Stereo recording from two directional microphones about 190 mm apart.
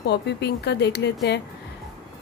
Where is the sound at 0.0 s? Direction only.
60° left (ahead or behind).